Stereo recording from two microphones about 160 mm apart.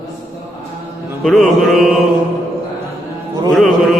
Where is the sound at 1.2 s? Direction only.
Centre (ahead or behind).